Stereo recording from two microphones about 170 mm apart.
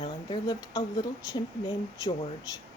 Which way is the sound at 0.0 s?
25° left (ahead or behind).